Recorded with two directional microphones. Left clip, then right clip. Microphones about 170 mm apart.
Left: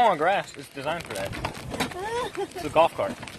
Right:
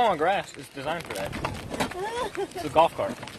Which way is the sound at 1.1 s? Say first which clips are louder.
Even; 40° right (ahead or behind).